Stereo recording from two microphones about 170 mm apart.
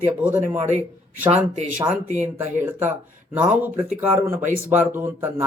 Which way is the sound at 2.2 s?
10° right (ahead or behind).